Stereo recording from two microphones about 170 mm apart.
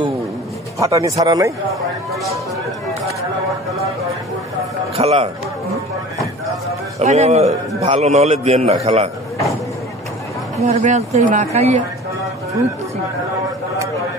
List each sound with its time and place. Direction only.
0.7 s speech: 20° right (ahead or behind)
4.9 s a man's voice: 35° right (ahead or behind)
7.0 s speech: 40° right (ahead or behind)
10.6 s speech: 40° right (ahead or behind)